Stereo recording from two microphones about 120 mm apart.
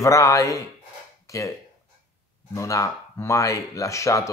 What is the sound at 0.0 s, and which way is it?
Speech, 25° left (ahead or behind).